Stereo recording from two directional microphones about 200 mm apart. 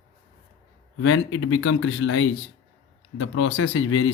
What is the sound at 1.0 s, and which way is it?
Speech, 90° left.